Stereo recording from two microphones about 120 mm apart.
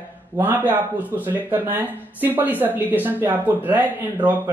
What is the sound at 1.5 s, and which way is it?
Speech, 15° right (ahead or behind).